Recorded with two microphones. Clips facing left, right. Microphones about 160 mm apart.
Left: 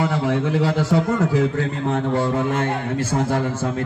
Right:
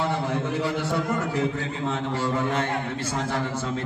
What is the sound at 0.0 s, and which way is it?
A man's voice, 85° left.